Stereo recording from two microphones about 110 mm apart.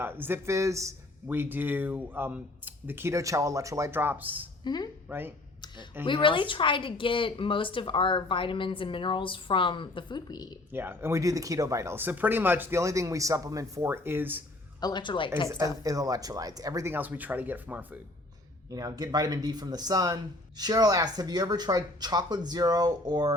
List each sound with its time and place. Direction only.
0.0 s speech: 20° right (ahead or behind)
4.6 s speech: 40° left (ahead or behind)
5.0 s speech: 20° right (ahead or behind)
6.1 s a woman's voice: 45° left (ahead or behind)
10.7 s speech: 20° right (ahead or behind)
12.8 s speech: 30° right (ahead or behind)
14.8 s a woman's voice: 40° left (ahead or behind)
15.4 s speech: 25° right (ahead or behind)
16.9 s speech: 15° right (ahead or behind)
18.7 s speech: 35° right (ahead or behind)